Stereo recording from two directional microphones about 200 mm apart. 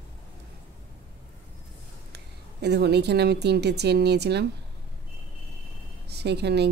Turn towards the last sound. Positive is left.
turn(degrees=-55)  # may be behind; listen again after turning